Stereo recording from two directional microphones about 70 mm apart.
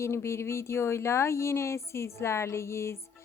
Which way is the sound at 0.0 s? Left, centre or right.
Left.